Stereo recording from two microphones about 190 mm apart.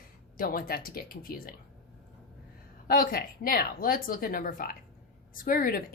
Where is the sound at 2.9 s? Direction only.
50° left (ahead or behind).